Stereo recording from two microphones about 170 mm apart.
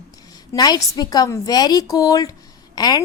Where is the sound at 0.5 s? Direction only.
25° left (ahead or behind).